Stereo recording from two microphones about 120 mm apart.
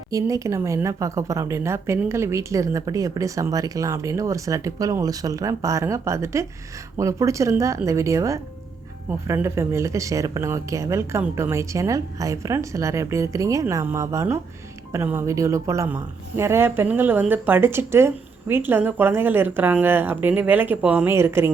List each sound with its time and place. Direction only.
0.1 s speech: 25° right (ahead or behind)